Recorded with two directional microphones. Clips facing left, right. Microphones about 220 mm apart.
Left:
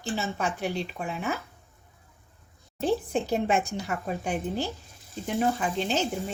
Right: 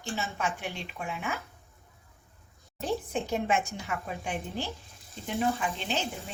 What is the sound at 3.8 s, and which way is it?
Speech, 40° left (ahead or behind).